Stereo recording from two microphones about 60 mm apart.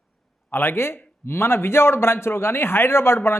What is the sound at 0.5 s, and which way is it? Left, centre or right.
A man's voice, left.